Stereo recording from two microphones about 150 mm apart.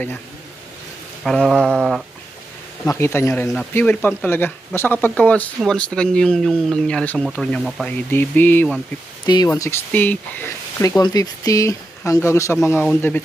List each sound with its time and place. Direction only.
1.2 s speech: centre (ahead or behind)
2.9 s speech: 15° left (ahead or behind); by 7.9 s centre (ahead or behind)
7.9 s speech: 10° left (ahead or behind)
9.2 s speech: 30° left (ahead or behind)
9.5 s speech: 15° left (ahead or behind)
12.8 s speech: 10° left (ahead or behind)